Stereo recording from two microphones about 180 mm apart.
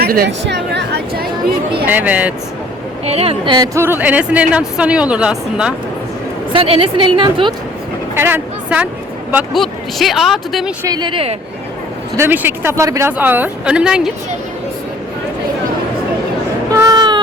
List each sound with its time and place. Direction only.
0.0 s speech: 60° right (ahead or behind)
1.9 s a woman's voice: 10° right (ahead or behind)
3.1 s a woman's voice: 35° right (ahead or behind); by 5.7 s 5° right (ahead or behind)
6.5 s a woman's voice: 30° right (ahead or behind)
8.1 s a woman's voice: 10° right (ahead or behind)
10.8 s a woman's voice: 25° right (ahead or behind)
12.1 s a woman's voice: 10° right (ahead or behind)
16.7 s a sound: 20° right (ahead or behind)